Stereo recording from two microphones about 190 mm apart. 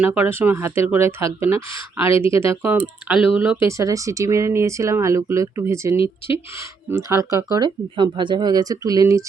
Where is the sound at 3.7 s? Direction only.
15° right (ahead or behind).